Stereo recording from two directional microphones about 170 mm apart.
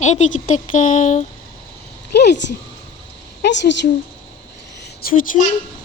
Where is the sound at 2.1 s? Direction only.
85° left.